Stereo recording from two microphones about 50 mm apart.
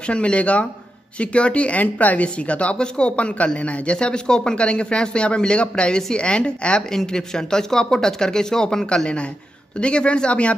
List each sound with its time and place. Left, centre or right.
0.0 s speech: left